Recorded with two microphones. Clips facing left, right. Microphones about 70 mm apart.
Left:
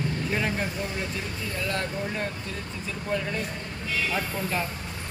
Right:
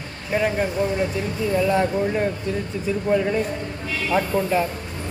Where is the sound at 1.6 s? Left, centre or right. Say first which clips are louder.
Right 7 dB; centre.